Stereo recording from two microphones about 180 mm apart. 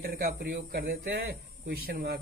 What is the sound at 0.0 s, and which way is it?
Speech, 60° right (ahead or behind).